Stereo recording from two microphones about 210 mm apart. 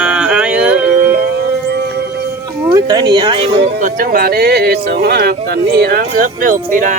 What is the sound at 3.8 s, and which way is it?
Speech, 40° right (ahead or behind).